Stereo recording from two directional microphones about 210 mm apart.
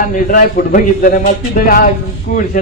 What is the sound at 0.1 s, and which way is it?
A man's voice, 40° left (ahead or behind).